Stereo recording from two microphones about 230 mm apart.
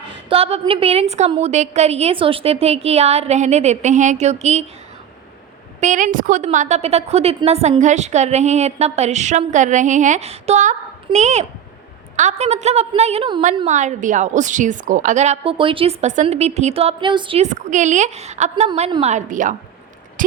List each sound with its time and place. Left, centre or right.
0.3 s a woman's voice: right
5.8 s a woman's voice: right
20.2 s a sound: right